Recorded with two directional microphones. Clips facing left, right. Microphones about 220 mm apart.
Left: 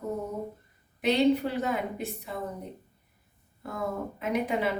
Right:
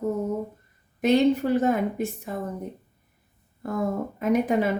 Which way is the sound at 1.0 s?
45° right (ahead or behind).